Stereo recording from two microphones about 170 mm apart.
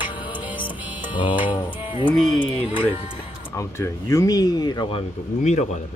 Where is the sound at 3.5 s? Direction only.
15° left (ahead or behind).